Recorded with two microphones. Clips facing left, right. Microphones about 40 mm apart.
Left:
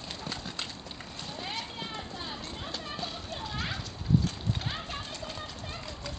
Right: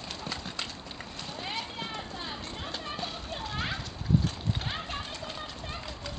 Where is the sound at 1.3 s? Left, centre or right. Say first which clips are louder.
Right 2 dB; centre.